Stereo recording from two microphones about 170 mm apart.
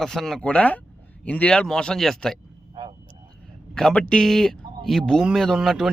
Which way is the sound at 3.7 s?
5° left (ahead or behind).